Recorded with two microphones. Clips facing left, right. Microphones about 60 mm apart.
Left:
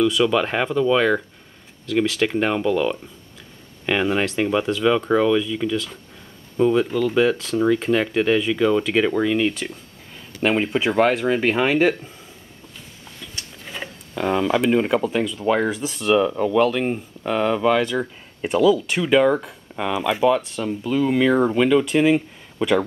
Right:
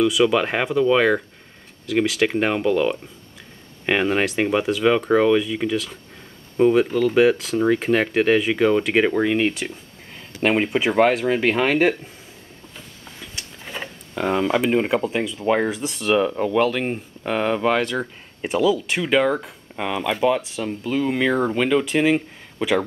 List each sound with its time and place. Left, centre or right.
0.0 s speech: centre
4.0 s speech: centre
6.8 s speech: centre
13.7 s a sound: centre
15.4 s speech: centre